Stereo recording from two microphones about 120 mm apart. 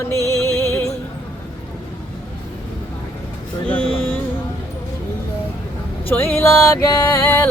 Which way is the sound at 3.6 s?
15° left (ahead or behind).